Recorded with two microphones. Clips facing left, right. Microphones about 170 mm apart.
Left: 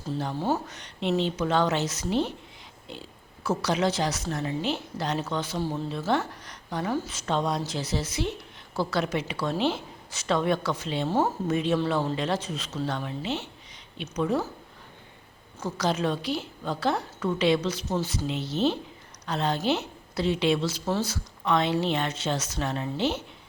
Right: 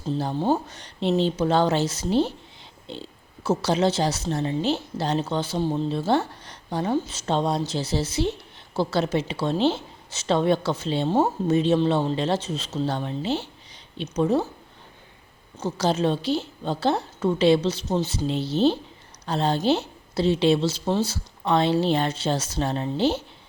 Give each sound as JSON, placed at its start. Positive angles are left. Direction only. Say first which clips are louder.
{"t": 0.1, "sound": "a woman's voice", "louder": "right 4 dB", "side_deg": -30}
{"t": 15.6, "sound": "a woman's voice", "louder": "right 4 dB", "side_deg": -30}